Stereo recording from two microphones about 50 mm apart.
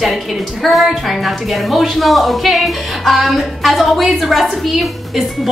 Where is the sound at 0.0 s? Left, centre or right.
Centre.